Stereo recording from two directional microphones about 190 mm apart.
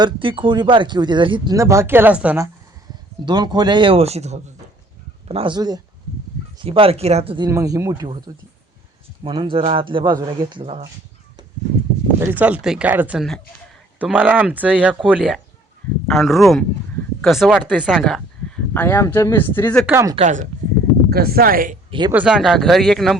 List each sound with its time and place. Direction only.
0.0 s speech: 25° right (ahead or behind); by 2.5 s 10° right (ahead or behind)
3.2 s speech: 20° right (ahead or behind)
9.2 s speech: 25° right (ahead or behind)
12.2 s speech: 10° right (ahead or behind); by 19.8 s 10° left (ahead or behind)
20.1 s speech: 40° right (ahead or behind)
21.1 s speech: 55° right (ahead or behind)
21.8 s speech: 25° right (ahead or behind)
22.1 s speech: 5° right (ahead or behind)